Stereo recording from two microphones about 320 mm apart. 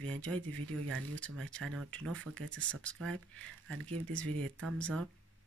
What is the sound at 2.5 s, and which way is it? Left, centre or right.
Speech, centre.